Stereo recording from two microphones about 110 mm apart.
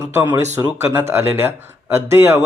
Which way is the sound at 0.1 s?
20° right (ahead or behind).